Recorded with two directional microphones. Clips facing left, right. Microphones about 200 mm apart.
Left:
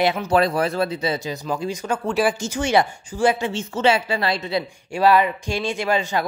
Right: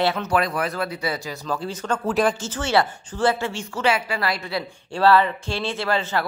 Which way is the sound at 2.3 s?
15° left (ahead or behind).